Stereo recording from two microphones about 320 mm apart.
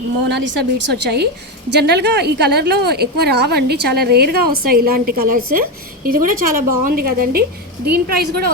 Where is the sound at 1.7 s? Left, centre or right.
Right.